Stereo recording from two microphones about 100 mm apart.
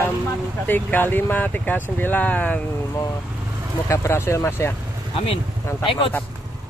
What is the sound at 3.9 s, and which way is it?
Speech, 30° left (ahead or behind).